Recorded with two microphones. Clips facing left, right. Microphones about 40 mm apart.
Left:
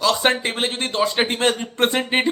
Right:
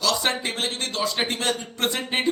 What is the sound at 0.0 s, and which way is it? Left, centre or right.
Speech, left.